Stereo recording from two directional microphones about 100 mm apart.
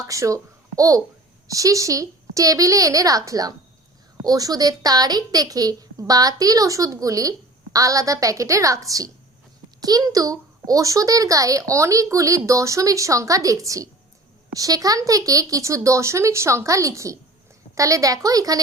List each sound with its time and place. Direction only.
0.1 s a woman's voice: 35° right (ahead or behind)